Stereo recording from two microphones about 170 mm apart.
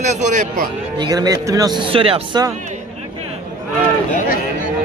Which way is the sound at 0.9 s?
25° right (ahead or behind).